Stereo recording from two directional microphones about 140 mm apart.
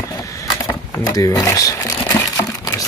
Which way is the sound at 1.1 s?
25° left (ahead or behind).